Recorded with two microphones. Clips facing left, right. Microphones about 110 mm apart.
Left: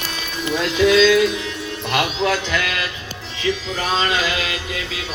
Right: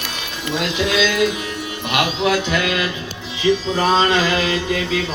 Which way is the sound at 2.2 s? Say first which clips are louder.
Right 2 dB; 15° right (ahead or behind).